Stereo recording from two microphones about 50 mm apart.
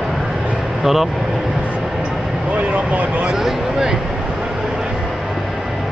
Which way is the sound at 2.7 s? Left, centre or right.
Right.